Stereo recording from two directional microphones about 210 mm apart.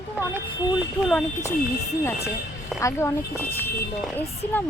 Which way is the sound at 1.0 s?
10° left (ahead or behind).